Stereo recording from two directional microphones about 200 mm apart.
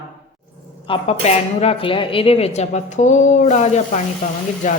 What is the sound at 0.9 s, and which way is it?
Speech, 30° left (ahead or behind).